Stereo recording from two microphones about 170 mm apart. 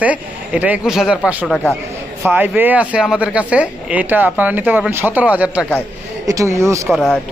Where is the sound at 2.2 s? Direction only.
10° right (ahead or behind).